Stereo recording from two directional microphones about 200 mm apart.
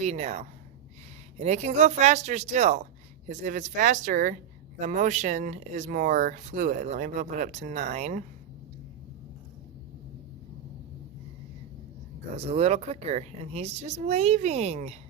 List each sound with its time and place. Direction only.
0.0 s speech: 35° right (ahead or behind)
12.4 s speech: 30° right (ahead or behind)